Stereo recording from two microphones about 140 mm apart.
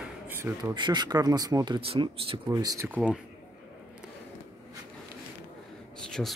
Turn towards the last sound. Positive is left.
turn(degrees=5)  # may be behind; listen again after turning